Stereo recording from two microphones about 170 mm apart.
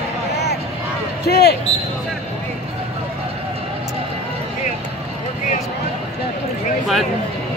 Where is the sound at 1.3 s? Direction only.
70° left (ahead or behind).